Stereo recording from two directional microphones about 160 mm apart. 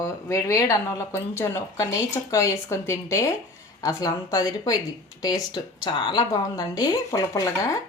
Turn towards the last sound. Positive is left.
turn(degrees=20)  # may be behind; listen again after turning